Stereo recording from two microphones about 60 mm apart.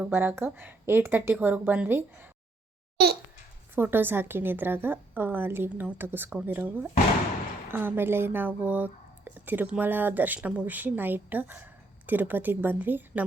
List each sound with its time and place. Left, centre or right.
0.0 s speech: right
3.8 s speech: right